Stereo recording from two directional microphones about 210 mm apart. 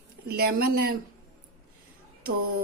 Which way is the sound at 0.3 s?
45° right (ahead or behind).